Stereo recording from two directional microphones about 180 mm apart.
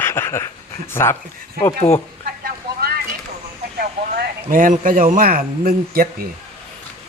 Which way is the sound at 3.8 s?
50° right (ahead or behind).